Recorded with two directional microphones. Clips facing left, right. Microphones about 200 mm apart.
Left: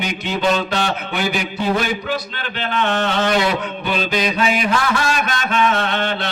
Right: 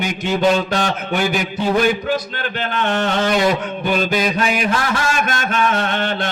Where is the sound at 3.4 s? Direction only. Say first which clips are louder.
Right 3 dB; 45° right (ahead or behind).